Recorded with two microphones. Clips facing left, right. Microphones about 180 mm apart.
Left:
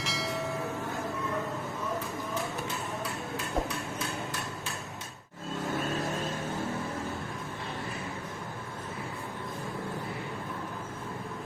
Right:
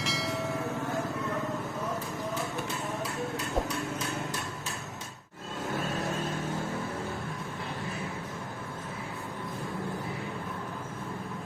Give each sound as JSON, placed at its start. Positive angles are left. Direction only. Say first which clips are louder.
{"t": 0.0, "sound": "train", "louder": "right 1 dB", "side_deg": 0}